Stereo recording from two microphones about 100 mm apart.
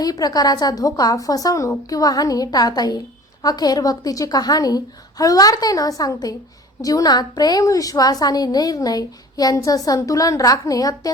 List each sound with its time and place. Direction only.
0.0 s a woman's voice: 40° left (ahead or behind)